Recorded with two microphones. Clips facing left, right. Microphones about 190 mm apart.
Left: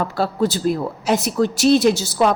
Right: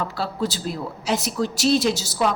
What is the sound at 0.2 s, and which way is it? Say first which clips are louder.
A woman's voice: left 10 dB; 55° left (ahead or behind).